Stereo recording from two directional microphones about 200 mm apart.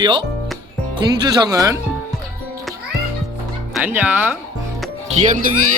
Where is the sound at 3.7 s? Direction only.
10° right (ahead or behind).